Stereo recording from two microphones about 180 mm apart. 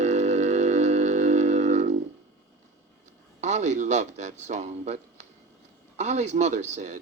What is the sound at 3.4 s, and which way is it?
A man's voice, 40° right (ahead or behind).